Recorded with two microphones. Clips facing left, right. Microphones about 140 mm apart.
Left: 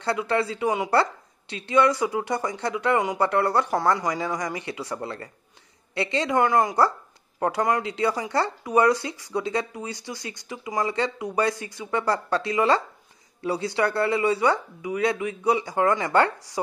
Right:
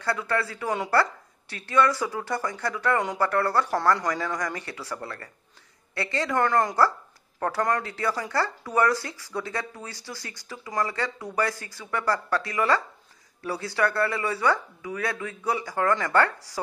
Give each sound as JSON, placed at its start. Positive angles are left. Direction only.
{"t": 0.0, "sound": "a woman's voice", "side_deg": 20}